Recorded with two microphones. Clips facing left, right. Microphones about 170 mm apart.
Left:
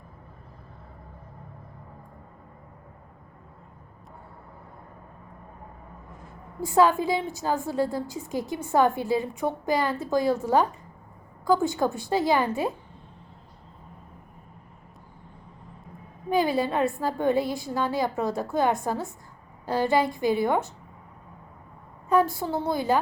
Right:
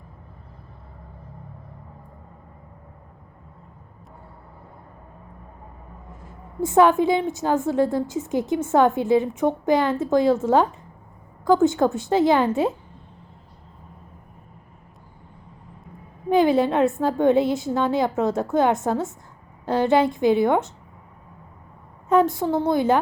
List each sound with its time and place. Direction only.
6.6 s a woman's voice: 20° right (ahead or behind)
16.3 s a sound: 20° right (ahead or behind)
16.8 s a woman's voice: 20° right (ahead or behind)
22.1 s a woman's voice: 20° right (ahead or behind)